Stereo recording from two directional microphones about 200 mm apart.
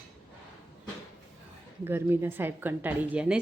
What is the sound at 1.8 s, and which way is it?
A woman's voice, 10° right (ahead or behind).